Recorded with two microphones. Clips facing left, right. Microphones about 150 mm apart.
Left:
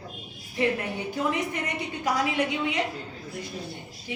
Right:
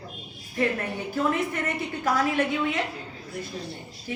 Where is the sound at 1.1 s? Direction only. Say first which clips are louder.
Right 3 dB; 15° left (ahead or behind).